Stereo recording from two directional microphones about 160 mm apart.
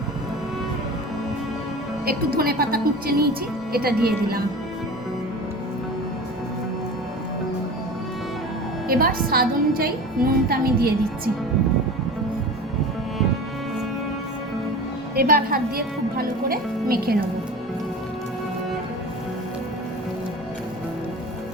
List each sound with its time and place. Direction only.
2.0 s a woman's voice: 70° right (ahead or behind)
8.9 s a woman's voice: 70° right (ahead or behind)
15.1 s a woman's voice: 70° right (ahead or behind)